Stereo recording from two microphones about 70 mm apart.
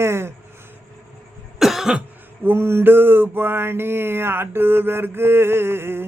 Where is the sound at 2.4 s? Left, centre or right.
Right.